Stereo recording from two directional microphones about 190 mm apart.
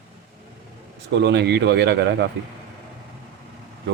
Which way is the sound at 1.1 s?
65° right (ahead or behind).